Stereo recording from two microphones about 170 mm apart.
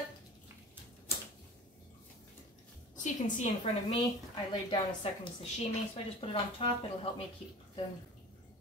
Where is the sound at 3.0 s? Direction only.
45° left (ahead or behind).